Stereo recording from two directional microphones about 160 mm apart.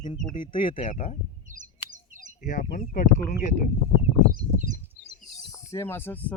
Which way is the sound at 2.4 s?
55° left (ahead or behind).